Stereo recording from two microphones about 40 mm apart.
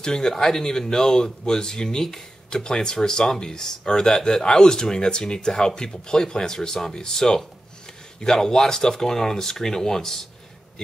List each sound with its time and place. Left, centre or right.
0.0 s speech: centre